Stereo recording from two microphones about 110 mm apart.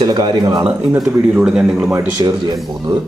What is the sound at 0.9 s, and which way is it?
Speech, 5° right (ahead or behind).